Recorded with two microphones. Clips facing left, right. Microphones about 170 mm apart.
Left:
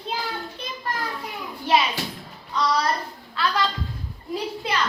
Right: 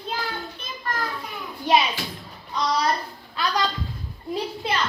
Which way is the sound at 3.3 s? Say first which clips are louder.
Left 1 dB; 15° right (ahead or behind).